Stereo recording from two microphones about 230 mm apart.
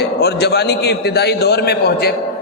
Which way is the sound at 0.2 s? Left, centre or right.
Left.